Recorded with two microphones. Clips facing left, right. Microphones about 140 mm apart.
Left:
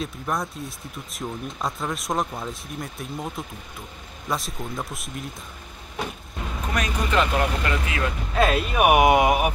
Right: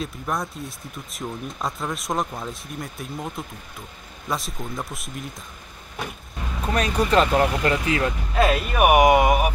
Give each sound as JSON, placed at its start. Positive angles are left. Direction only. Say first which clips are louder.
{"t": 0.0, "sound": "speech", "louder": "even", "side_deg": 0}
{"t": 6.7, "sound": "speech", "louder": "right 5 dB", "side_deg": -35}
{"t": 8.5, "sound": "speech", "louder": "right 1 dB", "side_deg": 0}